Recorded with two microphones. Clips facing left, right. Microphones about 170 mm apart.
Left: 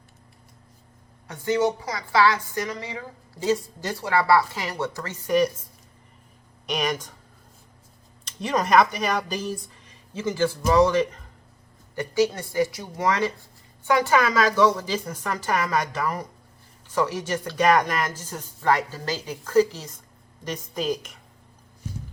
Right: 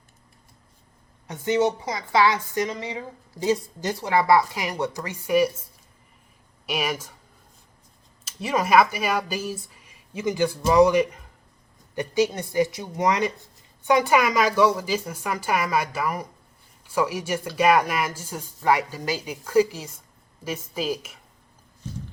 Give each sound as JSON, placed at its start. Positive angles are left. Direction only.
{"t": 1.3, "sound": "a woman's voice", "side_deg": -20}
{"t": 6.7, "sound": "speech", "side_deg": -5}
{"t": 8.2, "sound": "a woman's voice", "side_deg": -5}